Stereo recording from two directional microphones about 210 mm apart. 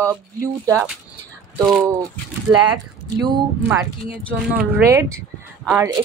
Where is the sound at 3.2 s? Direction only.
20° right (ahead or behind).